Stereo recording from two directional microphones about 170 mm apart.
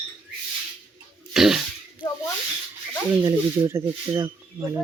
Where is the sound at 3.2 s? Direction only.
15° right (ahead or behind).